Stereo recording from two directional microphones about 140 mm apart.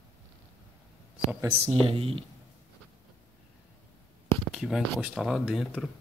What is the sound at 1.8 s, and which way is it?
Speech, 40° right (ahead or behind).